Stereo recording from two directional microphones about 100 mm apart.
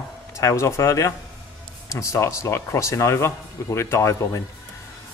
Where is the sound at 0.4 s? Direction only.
30° left (ahead or behind).